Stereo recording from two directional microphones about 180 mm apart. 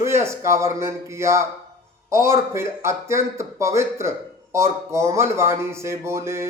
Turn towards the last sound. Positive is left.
turn(degrees=-15)  # may be behind; listen again after turning